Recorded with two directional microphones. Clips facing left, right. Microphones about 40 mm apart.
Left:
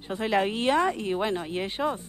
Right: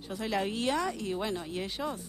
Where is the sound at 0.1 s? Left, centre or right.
Left.